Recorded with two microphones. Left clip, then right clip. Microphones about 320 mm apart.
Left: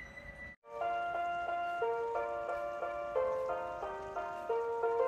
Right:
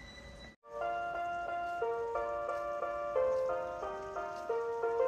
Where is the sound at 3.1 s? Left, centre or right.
Left.